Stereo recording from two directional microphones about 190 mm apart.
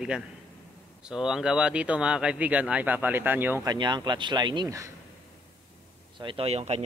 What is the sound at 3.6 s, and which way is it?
Speech, 25° right (ahead or behind).